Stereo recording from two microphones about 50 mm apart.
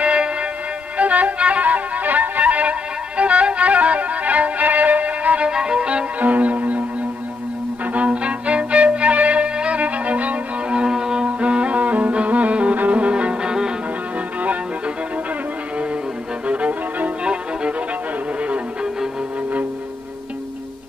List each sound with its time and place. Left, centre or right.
0.0 s music: right
5.5 s violin: centre
6.1 s music: right; by 11.2 s centre
11.2 s music: right
16.4 s violin: right
18.4 s music: right